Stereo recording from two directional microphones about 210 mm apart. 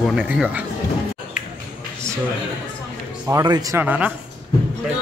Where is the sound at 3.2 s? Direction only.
15° right (ahead or behind).